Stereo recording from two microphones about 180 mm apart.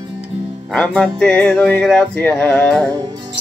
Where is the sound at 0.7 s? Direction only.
5° left (ahead or behind).